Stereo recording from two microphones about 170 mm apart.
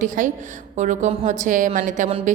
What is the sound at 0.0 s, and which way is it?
A woman's voice, 45° right (ahead or behind).